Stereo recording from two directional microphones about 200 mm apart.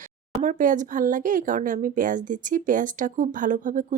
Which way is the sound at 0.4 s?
40° right (ahead or behind).